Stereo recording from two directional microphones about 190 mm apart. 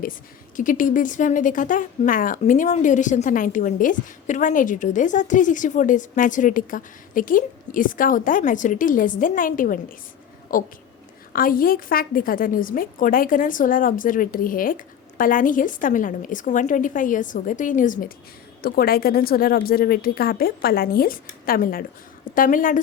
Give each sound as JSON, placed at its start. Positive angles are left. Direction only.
{"t": 0.0, "sound": "speech", "side_deg": 45}